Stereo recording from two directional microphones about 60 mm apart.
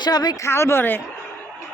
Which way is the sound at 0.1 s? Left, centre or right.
Left.